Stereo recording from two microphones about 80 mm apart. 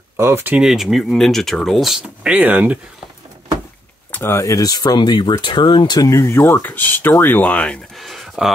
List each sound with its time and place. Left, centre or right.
0.2 s speech: right
0.6 s speech: centre
2.2 s speech: centre
4.1 s speech: left
5.4 s speech: left
6.0 s speech: left; by 7.8 s centre
7.9 s speech: centre